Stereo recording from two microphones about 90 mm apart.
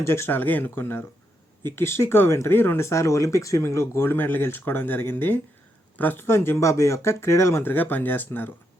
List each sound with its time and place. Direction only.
0.0 s speech: 30° left (ahead or behind)